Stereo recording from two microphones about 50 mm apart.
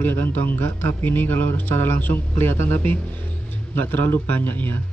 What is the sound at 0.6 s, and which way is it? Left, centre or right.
Speech, left.